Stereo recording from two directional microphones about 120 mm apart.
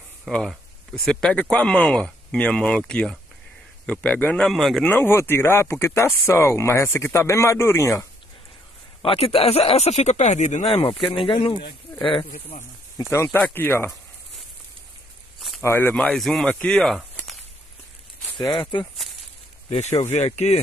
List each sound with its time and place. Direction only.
0.3 s a man's voice: 5° left (ahead or behind)
4.5 s speech: centre (ahead or behind)
4.8 s speech: 20° left (ahead or behind)
9.0 s speech: 50° left (ahead or behind); by 10.8 s 75° left (ahead or behind)
10.8 s speech: 45° left (ahead or behind)
13.1 s speech: 20° left (ahead or behind)
15.6 s speech: 20° left (ahead or behind)
15.9 s speech: 10° left (ahead or behind)
20.1 s speech: 65° left (ahead or behind)